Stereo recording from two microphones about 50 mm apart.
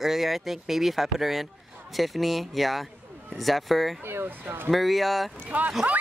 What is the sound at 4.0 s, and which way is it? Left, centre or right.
Speech, right.